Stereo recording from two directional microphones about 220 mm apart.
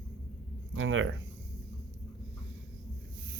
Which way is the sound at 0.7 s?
65° right (ahead or behind).